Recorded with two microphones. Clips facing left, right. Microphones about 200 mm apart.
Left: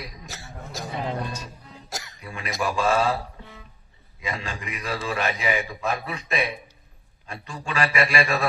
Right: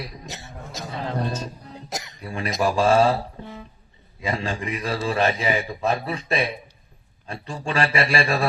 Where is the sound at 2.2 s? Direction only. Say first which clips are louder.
Right 6 dB; 35° right (ahead or behind).